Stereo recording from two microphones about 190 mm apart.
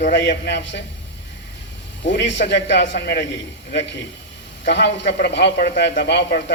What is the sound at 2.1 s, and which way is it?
A man's voice, 70° left (ahead or behind).